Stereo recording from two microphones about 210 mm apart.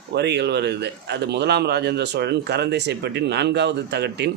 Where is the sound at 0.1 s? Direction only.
55° right (ahead or behind).